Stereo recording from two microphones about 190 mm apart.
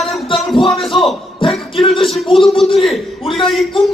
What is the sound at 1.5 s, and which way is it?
Music, centre (ahead or behind).